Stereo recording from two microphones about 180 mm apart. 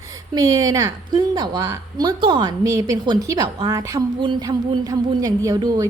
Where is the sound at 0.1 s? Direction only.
20° right (ahead or behind).